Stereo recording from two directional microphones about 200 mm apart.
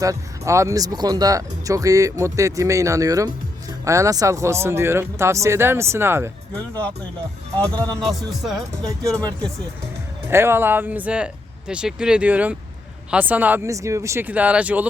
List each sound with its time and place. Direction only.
0.0 s speech: 15° right (ahead or behind)
6.5 s speech: 10° left (ahead or behind)
7.9 s speech: centre (ahead or behind)
8.7 s speech: 15° right (ahead or behind)
10.2 s speech: 10° right (ahead or behind)